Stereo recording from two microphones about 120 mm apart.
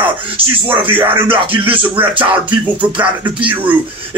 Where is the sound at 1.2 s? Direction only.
45° right (ahead or behind).